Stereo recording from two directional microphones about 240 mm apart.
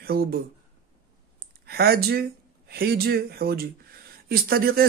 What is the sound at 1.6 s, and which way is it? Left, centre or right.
Speech, right.